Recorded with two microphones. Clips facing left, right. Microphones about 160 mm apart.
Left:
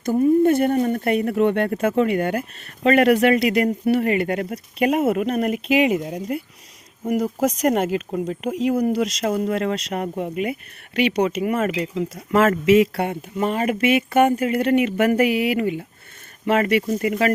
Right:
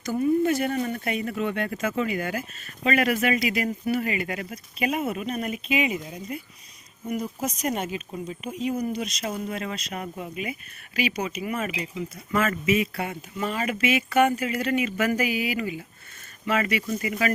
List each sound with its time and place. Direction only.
0.2 s speech: 50° left (ahead or behind); by 6.4 s 70° left (ahead or behind)
7.4 s speech: 80° left
9.5 s speech: 75° left (ahead or behind)
11.9 s speech: 85° left
13.1 s speech: 55° left (ahead or behind)